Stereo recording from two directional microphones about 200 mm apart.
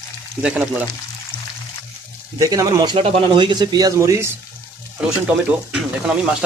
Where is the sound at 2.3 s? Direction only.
15° right (ahead or behind).